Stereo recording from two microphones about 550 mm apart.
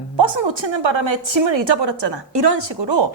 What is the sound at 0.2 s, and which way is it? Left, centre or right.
A woman's voice, right.